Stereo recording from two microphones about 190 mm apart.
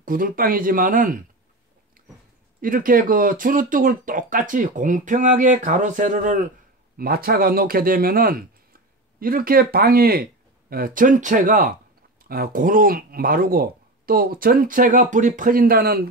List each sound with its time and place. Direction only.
0.0 s speech: 45° right (ahead or behind)
2.6 s speech: 45° right (ahead or behind)
7.0 s speech: 50° right (ahead or behind)